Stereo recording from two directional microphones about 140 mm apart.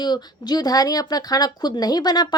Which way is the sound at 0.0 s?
30° left (ahead or behind).